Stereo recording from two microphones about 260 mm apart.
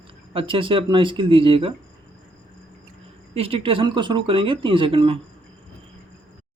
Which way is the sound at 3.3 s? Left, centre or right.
Right.